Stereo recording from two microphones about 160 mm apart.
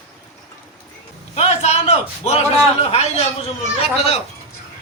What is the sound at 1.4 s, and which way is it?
A man's voice, 40° left (ahead or behind).